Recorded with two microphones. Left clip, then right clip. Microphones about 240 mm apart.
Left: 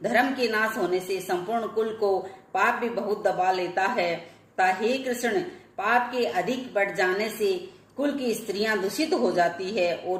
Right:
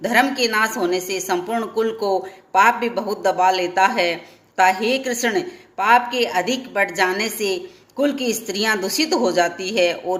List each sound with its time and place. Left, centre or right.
0.0 s a woman's voice: right